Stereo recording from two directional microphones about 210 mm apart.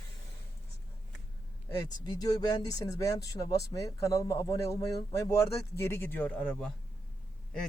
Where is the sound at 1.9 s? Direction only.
20° left (ahead or behind).